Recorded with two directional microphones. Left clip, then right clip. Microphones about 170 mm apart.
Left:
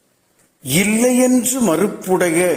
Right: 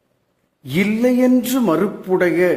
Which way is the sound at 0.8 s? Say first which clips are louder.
Left 1 dB; 20° left (ahead or behind).